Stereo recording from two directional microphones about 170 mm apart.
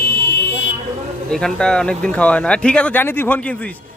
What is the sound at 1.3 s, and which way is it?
A man's voice, 5° left (ahead or behind).